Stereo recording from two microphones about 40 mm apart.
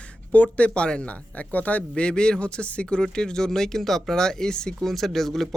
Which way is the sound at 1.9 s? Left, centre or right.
Left.